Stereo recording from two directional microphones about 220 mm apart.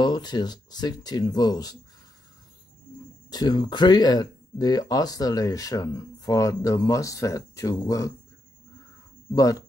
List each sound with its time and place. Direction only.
0.0 s speech: 20° left (ahead or behind)
3.3 s speech: 20° left (ahead or behind)
9.3 s speech: 15° left (ahead or behind)